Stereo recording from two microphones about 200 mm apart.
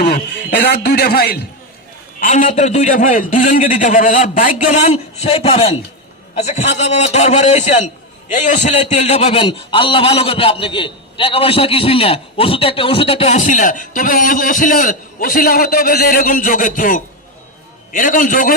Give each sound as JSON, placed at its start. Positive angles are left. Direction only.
{"t": 0.0, "sound": "a man's voice", "side_deg": 50}
{"t": 2.2, "sound": "a man's voice", "side_deg": 40}